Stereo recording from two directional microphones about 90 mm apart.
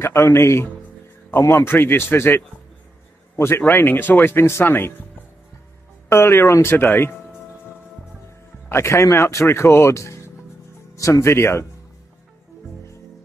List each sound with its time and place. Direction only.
0.0 s speech: 30° left (ahead or behind)
6.0 s speech: 30° left (ahead or behind)
8.6 s speech: 30° left (ahead or behind)